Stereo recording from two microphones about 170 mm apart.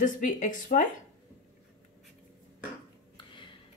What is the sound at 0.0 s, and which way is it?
Speech, 50° left (ahead or behind).